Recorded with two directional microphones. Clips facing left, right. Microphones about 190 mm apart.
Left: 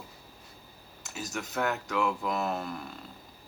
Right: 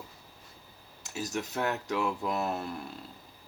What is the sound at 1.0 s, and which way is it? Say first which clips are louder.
Speech: right 3 dB; 35° right (ahead or behind).